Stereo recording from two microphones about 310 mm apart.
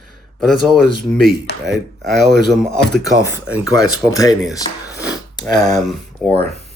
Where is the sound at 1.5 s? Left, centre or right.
Left.